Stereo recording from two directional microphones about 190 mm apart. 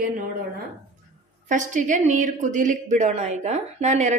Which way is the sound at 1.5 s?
40° right (ahead or behind).